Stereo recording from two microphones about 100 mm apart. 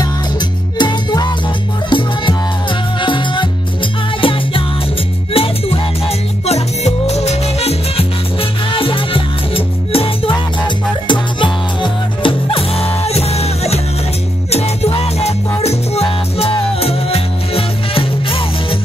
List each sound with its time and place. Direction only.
0.7 s music: 45° left (ahead or behind); by 4.6 s 60° left (ahead or behind)
5.3 s music: 75° left (ahead or behind)
11.1 s music: 55° left (ahead or behind); by 18.8 s 70° left (ahead or behind)